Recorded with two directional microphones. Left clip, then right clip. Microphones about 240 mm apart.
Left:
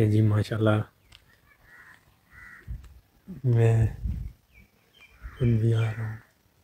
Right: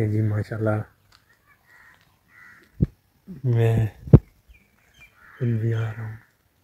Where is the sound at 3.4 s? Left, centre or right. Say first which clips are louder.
Right 2 dB; centre.